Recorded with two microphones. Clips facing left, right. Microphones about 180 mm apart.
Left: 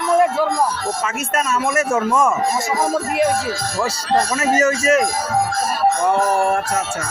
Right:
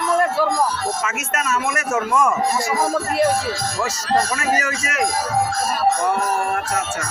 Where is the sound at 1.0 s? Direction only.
30° left (ahead or behind).